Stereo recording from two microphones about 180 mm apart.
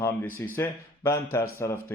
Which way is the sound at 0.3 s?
10° left (ahead or behind).